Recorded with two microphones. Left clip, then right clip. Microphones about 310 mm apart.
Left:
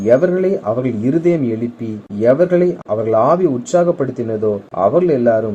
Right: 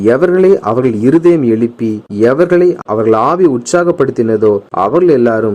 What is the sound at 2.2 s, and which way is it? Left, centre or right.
Speech, right.